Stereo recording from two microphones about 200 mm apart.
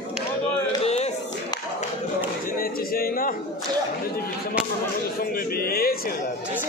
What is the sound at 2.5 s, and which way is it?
Music, 45° left (ahead or behind).